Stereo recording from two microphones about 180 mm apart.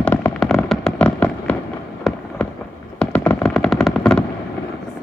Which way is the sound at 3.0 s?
5° left (ahead or behind).